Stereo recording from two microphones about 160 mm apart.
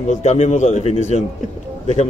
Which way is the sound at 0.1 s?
45° left (ahead or behind).